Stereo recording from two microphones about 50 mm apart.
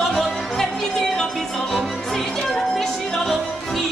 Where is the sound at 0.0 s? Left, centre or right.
Centre.